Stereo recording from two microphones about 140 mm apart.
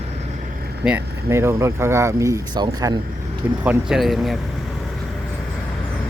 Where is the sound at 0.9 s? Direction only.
15° right (ahead or behind).